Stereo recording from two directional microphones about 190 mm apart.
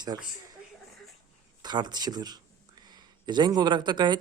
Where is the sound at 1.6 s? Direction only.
20° right (ahead or behind).